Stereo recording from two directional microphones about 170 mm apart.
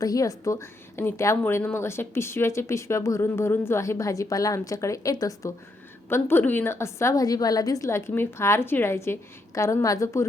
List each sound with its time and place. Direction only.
0.0 s a woman's voice: 20° left (ahead or behind)